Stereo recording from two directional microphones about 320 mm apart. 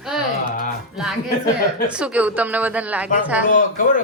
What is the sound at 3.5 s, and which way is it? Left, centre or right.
Speech, left.